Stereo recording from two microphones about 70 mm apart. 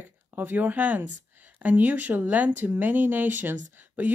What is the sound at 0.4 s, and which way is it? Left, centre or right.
Speech, right.